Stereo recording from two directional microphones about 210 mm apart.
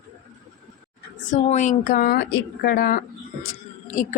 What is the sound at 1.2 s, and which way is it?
A woman's voice, 35° left (ahead or behind).